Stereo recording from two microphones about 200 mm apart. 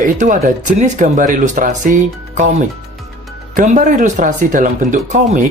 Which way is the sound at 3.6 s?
40° right (ahead or behind).